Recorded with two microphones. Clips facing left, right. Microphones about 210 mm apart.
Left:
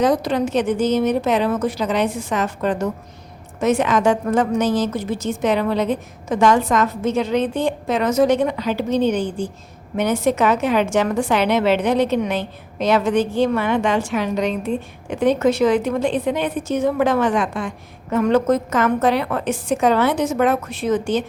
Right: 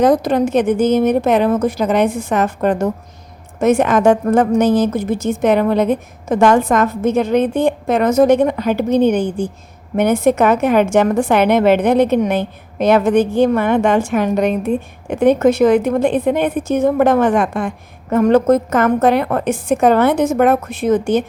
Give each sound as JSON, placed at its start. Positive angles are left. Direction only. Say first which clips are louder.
{"t": 0.0, "sound": "a woman's voice", "louder": "right 5 dB", "side_deg": -50}